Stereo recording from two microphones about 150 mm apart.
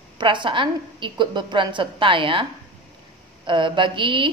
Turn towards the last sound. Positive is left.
turn(degrees=-35)  # may be behind; listen again after turning